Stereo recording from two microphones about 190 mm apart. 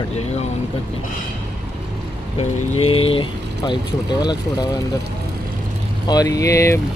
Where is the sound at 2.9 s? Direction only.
30° left (ahead or behind).